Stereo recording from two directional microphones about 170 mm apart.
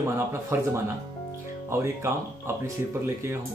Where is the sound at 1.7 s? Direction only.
15° right (ahead or behind).